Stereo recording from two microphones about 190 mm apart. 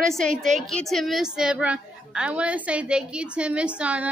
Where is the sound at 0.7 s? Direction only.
Centre (ahead or behind).